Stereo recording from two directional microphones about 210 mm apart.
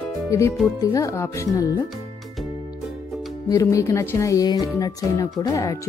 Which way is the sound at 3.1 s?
Centre (ahead or behind).